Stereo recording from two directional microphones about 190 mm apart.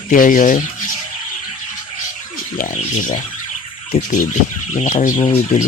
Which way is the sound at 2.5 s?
45° left (ahead or behind).